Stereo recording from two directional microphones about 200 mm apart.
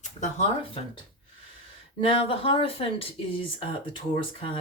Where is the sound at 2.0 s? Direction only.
25° left (ahead or behind).